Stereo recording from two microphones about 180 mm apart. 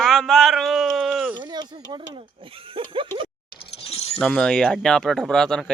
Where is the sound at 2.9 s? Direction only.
30° right (ahead or behind).